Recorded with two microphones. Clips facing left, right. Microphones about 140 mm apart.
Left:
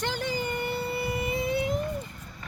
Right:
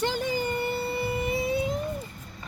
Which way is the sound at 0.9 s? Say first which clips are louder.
Right 1 dB; 10° left (ahead or behind).